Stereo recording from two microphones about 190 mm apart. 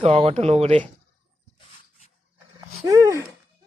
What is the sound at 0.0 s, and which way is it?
Speech, 30° right (ahead or behind).